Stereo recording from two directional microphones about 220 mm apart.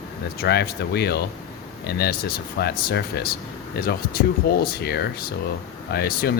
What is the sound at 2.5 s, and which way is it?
Speech, 45° left (ahead or behind).